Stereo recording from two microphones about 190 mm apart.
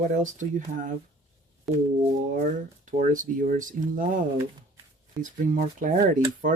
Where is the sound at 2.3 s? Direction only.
40° right (ahead or behind).